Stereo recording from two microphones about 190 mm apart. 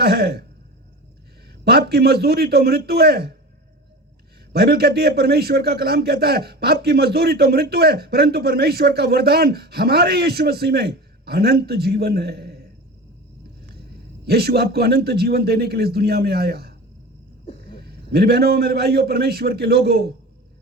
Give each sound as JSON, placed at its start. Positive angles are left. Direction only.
{"t": 0.0, "sound": "a man's voice", "side_deg": -55}
{"t": 1.9, "sound": "a man's voice", "side_deg": -55}
{"t": 4.5, "sound": "a man's voice", "side_deg": -55}
{"t": 14.3, "sound": "a man's voice", "side_deg": -55}